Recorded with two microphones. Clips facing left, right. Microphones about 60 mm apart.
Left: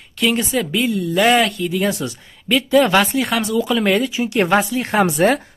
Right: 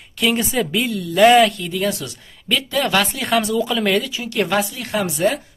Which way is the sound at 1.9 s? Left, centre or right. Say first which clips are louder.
Left 2 dB; centre.